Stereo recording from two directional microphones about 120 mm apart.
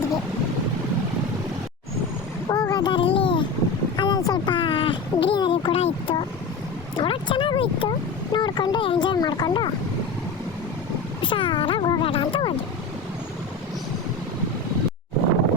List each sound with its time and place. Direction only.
2.5 s a sound: 35° left (ahead or behind); by 6.2 s 50° left (ahead or behind)
6.9 s speech: 45° left (ahead or behind)
11.2 s speech: 45° left (ahead or behind)